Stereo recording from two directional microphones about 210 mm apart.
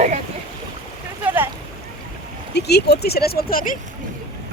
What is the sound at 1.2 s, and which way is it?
Boat, 10° right (ahead or behind).